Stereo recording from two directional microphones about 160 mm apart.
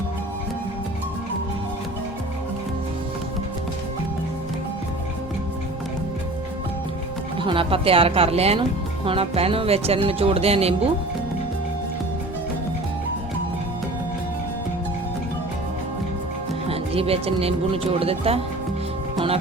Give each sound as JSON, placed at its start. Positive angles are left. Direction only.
{"t": 7.3, "sound": "speech", "side_deg": -35}
{"t": 16.6, "sound": "speech", "side_deg": -35}
{"t": 19.1, "sound": "music", "side_deg": -35}